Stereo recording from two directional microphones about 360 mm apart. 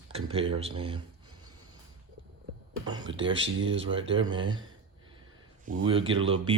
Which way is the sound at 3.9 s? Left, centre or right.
Centre.